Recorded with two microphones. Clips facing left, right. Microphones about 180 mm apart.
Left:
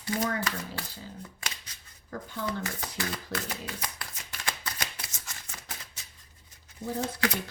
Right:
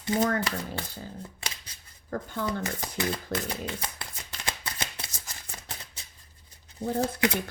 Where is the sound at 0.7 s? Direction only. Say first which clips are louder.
Right 3 dB; 30° right (ahead or behind).